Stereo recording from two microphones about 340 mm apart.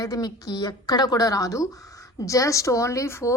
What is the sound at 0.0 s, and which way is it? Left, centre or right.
Speech, centre.